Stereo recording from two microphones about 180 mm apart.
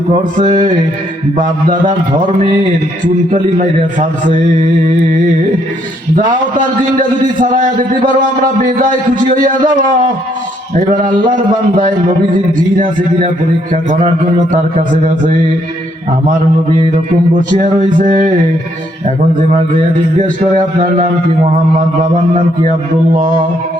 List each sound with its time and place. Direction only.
0.1 s a sound: 30° right (ahead or behind)
3.2 s a man's voice: 45° right (ahead or behind)
6.9 s a man's voice: 50° right (ahead or behind)
9.3 s a man's voice: 50° right (ahead or behind)
10.8 s a man's voice: 50° right (ahead or behind)
12.7 s a man's voice: 45° right (ahead or behind)
14.8 s a man's voice: 45° right (ahead or behind)
17.6 s a man's voice: 45° right (ahead or behind)
20.8 s a man's voice: 45° right (ahead or behind)
23.1 s a man's voice: 50° right (ahead or behind)